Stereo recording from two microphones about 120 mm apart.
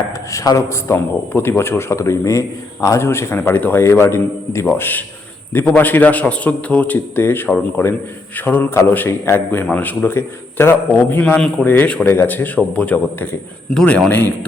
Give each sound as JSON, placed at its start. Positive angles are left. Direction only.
{"t": 0.3, "sound": "a man's voice", "side_deg": 25}
{"t": 11.2, "sound": "a man's voice", "side_deg": 5}